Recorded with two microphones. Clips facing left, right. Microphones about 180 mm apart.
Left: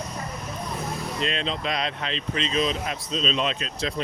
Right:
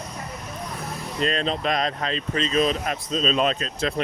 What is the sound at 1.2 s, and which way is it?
Speech, 45° right (ahead or behind).